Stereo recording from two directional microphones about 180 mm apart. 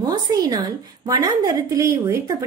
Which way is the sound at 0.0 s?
20° right (ahead or behind).